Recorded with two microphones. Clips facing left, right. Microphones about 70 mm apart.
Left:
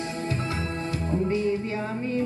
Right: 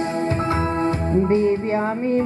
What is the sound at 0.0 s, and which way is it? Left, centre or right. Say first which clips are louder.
Music: right 8 dB; right.